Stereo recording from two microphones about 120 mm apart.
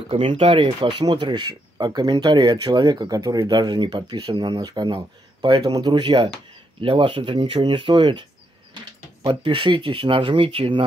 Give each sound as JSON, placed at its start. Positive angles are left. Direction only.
{"t": 0.1, "sound": "speech", "side_deg": -50}
{"t": 9.3, "sound": "speech", "side_deg": -45}